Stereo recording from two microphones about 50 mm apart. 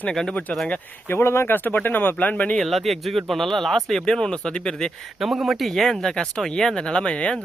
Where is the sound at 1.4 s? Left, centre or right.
Left.